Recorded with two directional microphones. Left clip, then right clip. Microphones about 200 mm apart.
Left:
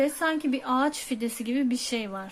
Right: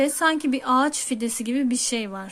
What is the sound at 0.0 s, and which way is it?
Speech, 25° right (ahead or behind).